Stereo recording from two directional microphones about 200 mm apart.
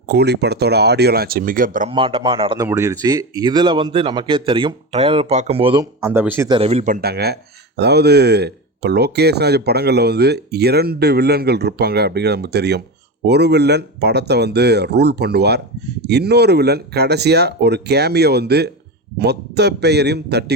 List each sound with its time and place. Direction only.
0.0 s speech: 55° right (ahead or behind)
1.9 s speech: 25° right (ahead or behind)
2.6 s speech: 15° right (ahead or behind)
5.8 s speech: 10° right (ahead or behind)
6.5 s speech: 30° right (ahead or behind); by 20.4 s 55° right (ahead or behind)